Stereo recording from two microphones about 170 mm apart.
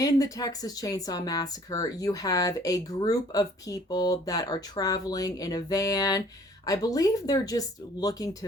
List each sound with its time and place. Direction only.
0.0 s speech: 20° left (ahead or behind)